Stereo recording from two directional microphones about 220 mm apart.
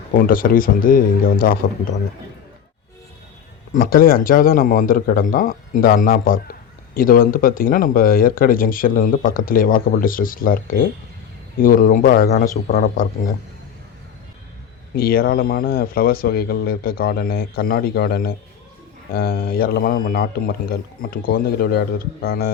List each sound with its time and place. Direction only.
0.1 s a man's voice: 40° left (ahead or behind)
3.7 s a man's voice: 40° left (ahead or behind)
14.9 s speech: 45° left (ahead or behind)